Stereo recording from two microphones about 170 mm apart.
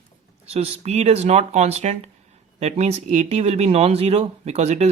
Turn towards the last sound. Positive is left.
turn(degrees=-40)  # may be behind; listen again after turning